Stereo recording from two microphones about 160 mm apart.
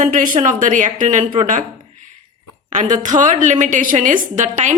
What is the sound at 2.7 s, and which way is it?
A woman's voice, 50° right (ahead or behind).